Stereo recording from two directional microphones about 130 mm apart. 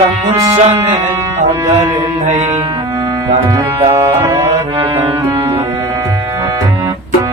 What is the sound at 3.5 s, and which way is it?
Music, 25° right (ahead or behind).